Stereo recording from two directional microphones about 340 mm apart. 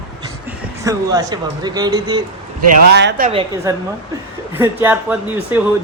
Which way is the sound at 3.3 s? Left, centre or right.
Centre.